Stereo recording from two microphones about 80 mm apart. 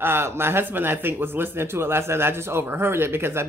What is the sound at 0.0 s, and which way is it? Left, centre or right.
Speech, right.